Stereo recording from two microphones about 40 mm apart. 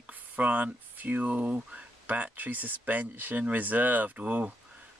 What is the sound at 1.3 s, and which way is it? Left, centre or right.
Speech, right.